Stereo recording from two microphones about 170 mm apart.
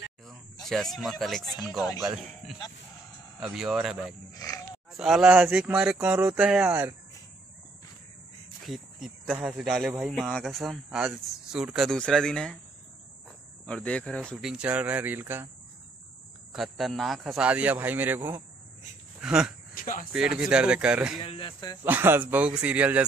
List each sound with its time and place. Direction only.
0.7 s speech: centre (ahead or behind)
4.3 s oink: 20° left (ahead or behind)
4.9 s a man's voice: centre (ahead or behind)
8.6 s speech: centre (ahead or behind)
13.7 s speech: 5° left (ahead or behind); by 15.4 s 10° right (ahead or behind)
16.5 s a man's voice: centre (ahead or behind)
19.7 s speech: 55° left (ahead or behind)
20.1 s speech: 5° right (ahead or behind)
21.2 s speech: 30° left (ahead or behind)
21.8 s a man's voice: 10° right (ahead or behind)